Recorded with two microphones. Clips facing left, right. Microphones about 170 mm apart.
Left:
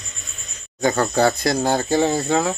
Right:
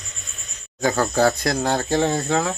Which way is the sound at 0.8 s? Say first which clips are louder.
Left 1 dB; centre (ahead or behind).